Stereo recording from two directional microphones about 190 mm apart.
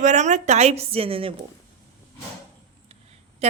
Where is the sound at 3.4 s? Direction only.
35° right (ahead or behind).